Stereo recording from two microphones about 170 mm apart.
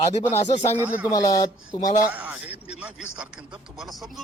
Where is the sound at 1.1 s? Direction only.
25° left (ahead or behind).